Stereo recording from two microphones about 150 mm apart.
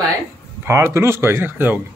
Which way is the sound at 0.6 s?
15° right (ahead or behind).